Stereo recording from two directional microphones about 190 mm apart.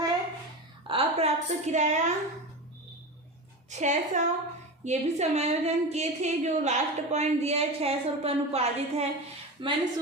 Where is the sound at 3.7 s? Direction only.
40° right (ahead or behind).